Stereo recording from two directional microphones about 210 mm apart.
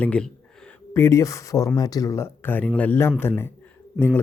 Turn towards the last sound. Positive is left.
turn(degrees=-5)  # may be behind; listen again after turning